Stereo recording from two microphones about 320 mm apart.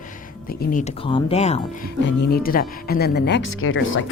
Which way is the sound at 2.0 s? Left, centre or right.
Left.